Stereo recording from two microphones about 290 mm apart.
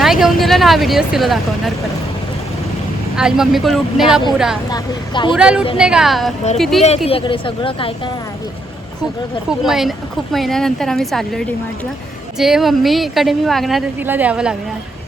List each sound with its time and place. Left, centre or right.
0.0 s speech: centre
3.2 s speech: centre
4.7 s a woman's voice: centre
5.3 s speech: centre
7.1 s a woman's voice: centre
9.5 s speech: centre